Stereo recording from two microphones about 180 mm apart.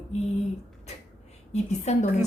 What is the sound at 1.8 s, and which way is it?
Speech, 40° left (ahead or behind).